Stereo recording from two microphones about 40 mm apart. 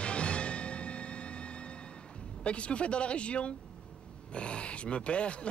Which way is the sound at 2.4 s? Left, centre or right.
Left.